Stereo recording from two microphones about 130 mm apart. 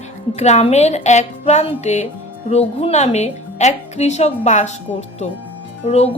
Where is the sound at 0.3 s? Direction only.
60° left (ahead or behind).